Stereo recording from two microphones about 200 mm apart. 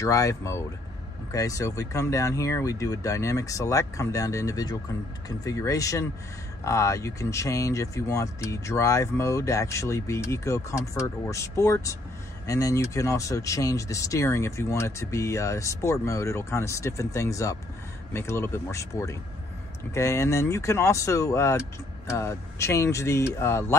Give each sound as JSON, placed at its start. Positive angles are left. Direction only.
{"t": 0.0, "sound": "speech", "side_deg": 15}